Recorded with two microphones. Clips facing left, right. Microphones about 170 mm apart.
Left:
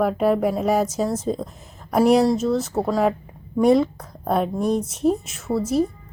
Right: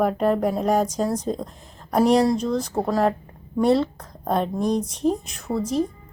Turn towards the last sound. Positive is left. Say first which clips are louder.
# left 2 dB
turn(degrees=5)  # may be behind; listen again after turning